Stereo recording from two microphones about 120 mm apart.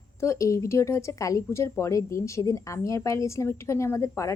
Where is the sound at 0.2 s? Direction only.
25° left (ahead or behind).